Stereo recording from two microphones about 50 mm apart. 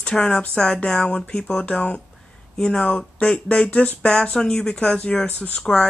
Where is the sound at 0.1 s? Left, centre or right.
Centre; by 5.6 s left.